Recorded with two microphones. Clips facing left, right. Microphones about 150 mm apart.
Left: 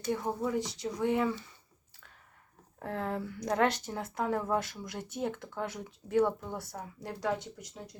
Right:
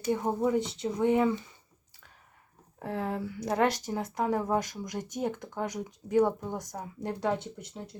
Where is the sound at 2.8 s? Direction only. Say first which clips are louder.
Right 2 dB; 10° right (ahead or behind).